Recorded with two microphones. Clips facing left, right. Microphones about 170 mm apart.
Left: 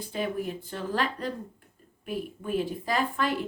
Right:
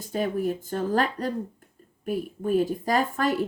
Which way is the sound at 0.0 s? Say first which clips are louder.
Right 4 dB; 45° right (ahead or behind).